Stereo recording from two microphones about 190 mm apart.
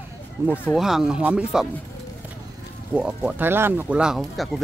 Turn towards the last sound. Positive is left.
turn(degrees=0)  # may be behind; listen again after turning